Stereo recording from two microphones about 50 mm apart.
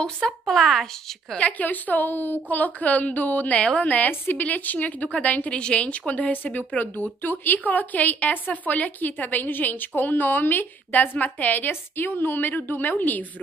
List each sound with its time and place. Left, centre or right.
0.0 s speech: centre
1.3 s a woman's voice: left